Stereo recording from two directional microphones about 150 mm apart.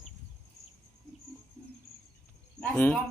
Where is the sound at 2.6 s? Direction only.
10° left (ahead or behind).